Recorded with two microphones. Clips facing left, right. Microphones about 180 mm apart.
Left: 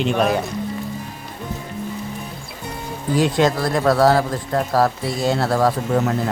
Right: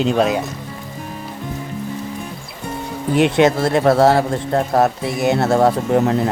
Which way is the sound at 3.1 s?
20° right (ahead or behind).